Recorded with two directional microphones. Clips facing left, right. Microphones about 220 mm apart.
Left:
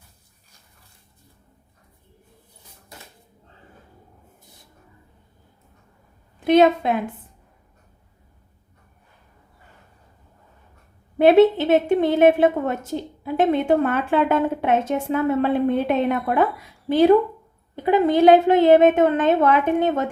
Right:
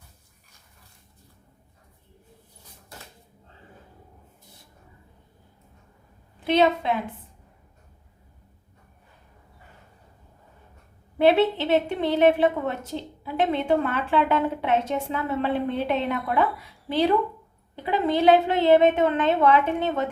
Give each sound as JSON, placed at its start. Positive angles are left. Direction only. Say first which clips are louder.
{"t": 6.5, "sound": "a woman's voice", "louder": "left 5 dB", "side_deg": 50}
{"t": 11.2, "sound": "a woman's voice", "louder": "left 6 dB", "side_deg": 45}